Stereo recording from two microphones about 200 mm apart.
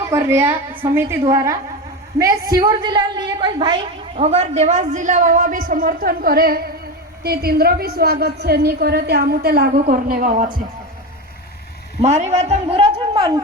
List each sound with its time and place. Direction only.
0.1 s a woman's voice: 15° right (ahead or behind); by 10.5 s 40° right (ahead or behind)
12.0 s a man's voice: 35° right (ahead or behind)